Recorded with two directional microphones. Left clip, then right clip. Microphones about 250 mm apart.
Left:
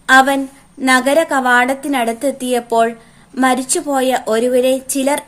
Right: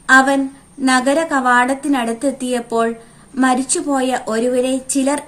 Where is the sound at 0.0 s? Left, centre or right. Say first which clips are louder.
Left 1 dB; left.